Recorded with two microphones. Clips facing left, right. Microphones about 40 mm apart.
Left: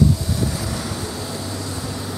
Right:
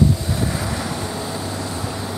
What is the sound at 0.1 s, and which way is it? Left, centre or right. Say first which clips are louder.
Vehicle: right 1 dB; right.